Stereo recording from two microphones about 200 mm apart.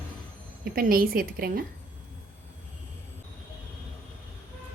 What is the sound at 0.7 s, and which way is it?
Speech, 45° right (ahead or behind).